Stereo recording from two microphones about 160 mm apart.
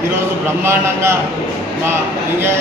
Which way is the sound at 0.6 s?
15° right (ahead or behind).